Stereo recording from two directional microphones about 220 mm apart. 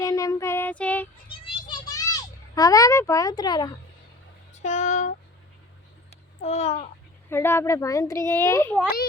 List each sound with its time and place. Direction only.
0.0 s a child's voice: 15° left (ahead or behind)
1.3 s a sound: 20° left (ahead or behind)
4.6 s speech: 30° left (ahead or behind)
6.4 s a child's voice: 30° left (ahead or behind)
7.3 s a child's voice: 10° left (ahead or behind)